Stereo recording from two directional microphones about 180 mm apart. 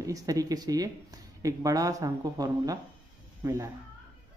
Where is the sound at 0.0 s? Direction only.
20° right (ahead or behind).